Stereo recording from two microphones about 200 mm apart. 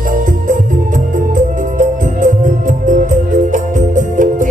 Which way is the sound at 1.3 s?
40° right (ahead or behind).